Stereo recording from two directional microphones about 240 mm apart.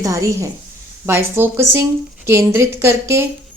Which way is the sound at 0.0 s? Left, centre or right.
Centre.